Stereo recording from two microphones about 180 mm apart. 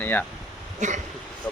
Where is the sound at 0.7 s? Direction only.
40° right (ahead or behind).